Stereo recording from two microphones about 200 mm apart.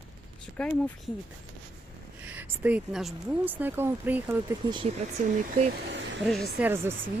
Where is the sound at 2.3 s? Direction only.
10° right (ahead or behind).